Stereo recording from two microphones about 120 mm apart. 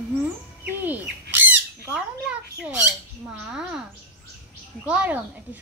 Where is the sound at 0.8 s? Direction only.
15° right (ahead or behind).